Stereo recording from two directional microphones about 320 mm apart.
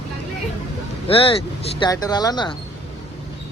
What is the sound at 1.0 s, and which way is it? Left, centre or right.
Speech, centre.